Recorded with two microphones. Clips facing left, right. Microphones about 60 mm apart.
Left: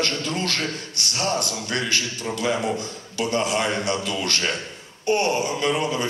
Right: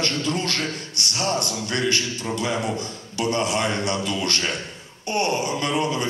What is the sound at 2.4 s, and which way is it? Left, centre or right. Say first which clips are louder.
A man's voice: left 3 dB; centre.